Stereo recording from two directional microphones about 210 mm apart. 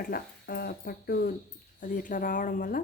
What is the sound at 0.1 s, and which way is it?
Speech, 45° left (ahead or behind).